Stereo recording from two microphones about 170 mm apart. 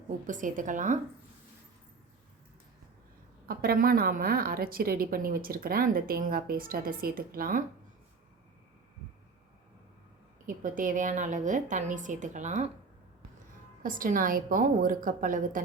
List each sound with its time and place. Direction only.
0.3 s a woman's voice: 50° right (ahead or behind)
3.4 s a woman's voice: 60° right (ahead or behind)
10.4 s a woman's voice: 50° right (ahead or behind)
13.8 s a woman's voice: 55° right (ahead or behind)